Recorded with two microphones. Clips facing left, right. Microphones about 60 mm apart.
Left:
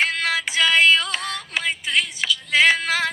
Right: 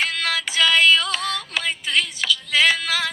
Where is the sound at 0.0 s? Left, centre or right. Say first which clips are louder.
Left 2 dB; left.